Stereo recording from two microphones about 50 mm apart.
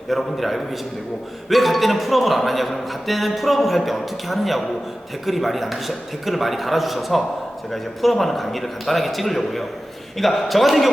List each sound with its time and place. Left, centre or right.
0.1 s a man's voice: centre